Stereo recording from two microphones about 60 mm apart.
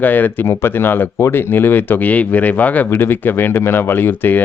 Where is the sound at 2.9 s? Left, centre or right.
Left.